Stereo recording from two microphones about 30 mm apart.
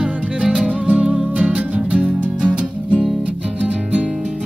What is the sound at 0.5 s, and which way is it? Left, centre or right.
Music, right.